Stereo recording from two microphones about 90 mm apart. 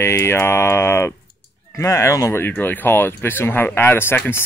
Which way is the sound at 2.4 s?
20° left (ahead or behind).